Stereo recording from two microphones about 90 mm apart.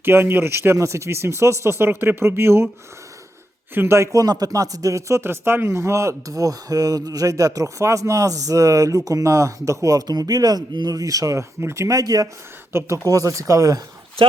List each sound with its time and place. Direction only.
0.0 s speech: 25° right (ahead or behind)
3.8 s speech: 30° right (ahead or behind)
12.7 s speech: 30° right (ahead or behind)